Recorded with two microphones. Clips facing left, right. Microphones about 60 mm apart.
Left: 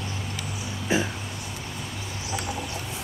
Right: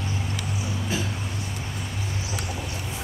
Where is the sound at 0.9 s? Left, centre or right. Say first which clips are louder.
Left 6 dB; left.